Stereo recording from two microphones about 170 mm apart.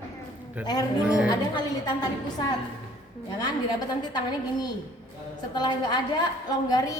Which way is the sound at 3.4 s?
25° left (ahead or behind).